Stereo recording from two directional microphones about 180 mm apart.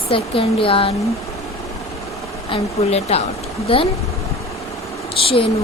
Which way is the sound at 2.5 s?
35° left (ahead or behind).